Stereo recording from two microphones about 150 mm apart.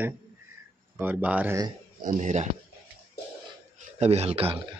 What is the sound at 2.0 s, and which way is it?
Speech, 50° right (ahead or behind).